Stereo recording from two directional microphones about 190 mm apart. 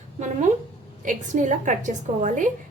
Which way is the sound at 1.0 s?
40° right (ahead or behind).